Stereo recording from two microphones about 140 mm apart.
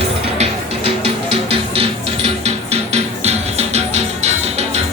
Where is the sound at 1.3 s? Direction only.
45° right (ahead or behind).